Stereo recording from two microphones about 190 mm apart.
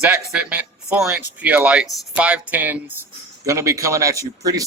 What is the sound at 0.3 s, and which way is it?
Speech, 5° right (ahead or behind).